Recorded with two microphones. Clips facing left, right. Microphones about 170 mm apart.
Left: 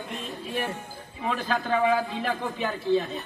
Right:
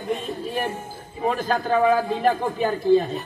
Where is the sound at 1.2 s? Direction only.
45° right (ahead or behind).